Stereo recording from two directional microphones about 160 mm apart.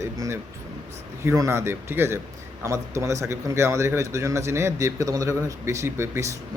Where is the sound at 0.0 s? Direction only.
20° right (ahead or behind).